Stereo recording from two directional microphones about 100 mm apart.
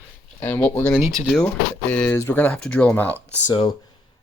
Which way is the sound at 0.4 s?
20° left (ahead or behind).